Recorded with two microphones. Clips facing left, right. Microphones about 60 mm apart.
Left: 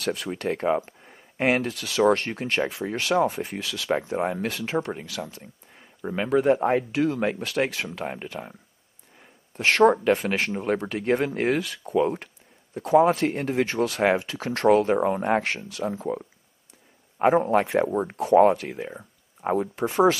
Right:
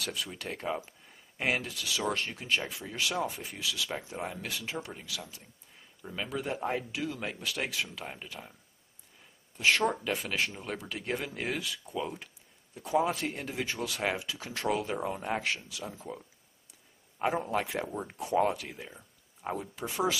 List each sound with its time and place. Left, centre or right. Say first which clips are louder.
0.0 s speech: left 10 dB; left
9.2 s a sound: left 3 dB; left
10.0 s a man's voice: left 9 dB; left
18.1 s speech: left 11 dB; left
18.4 s speech: left 11 dB; left